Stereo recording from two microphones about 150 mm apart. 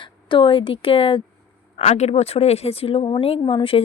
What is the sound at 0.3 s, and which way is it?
Speech, 35° left (ahead or behind).